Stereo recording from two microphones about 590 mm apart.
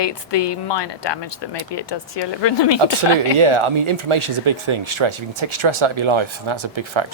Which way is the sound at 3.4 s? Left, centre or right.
Right.